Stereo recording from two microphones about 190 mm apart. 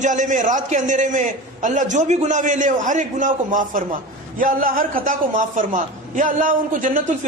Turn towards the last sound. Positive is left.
turn(degrees=-45)  # may be behind; listen again after turning